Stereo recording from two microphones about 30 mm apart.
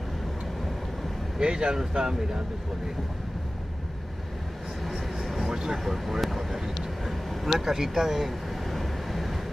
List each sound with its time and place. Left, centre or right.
1.4 s speech: right
1.8 s speech: centre
4.8 s vehicle: centre
5.5 s vehicle: right
5.9 s speech: centre
8.6 s vehicle: centre